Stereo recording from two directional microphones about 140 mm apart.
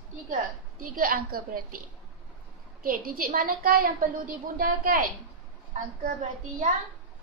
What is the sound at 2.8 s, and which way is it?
A woman's voice, 90° right.